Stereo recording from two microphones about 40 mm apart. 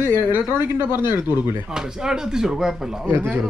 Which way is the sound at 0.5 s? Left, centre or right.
Right.